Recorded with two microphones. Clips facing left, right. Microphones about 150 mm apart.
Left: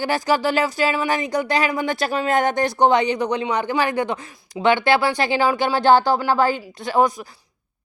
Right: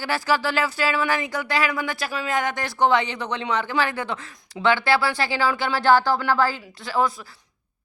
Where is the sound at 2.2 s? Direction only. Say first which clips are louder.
Left 6 dB; 50° left (ahead or behind).